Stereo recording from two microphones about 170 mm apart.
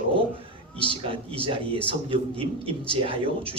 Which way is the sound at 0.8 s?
30° right (ahead or behind).